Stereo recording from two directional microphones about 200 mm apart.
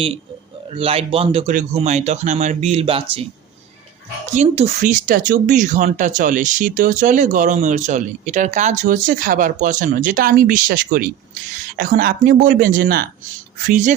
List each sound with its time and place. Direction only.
0.7 s speech: 30° right (ahead or behind)
4.4 s speech: 35° right (ahead or behind)